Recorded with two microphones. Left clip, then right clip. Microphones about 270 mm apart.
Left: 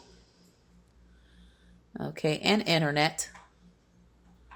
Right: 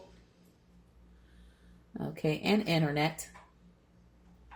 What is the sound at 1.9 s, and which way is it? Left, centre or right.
Speech, left.